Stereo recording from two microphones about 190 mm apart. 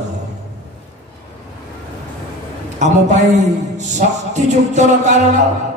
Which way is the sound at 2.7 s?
40° right (ahead or behind).